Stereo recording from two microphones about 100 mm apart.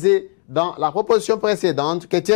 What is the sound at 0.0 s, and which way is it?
Speech, 15° left (ahead or behind).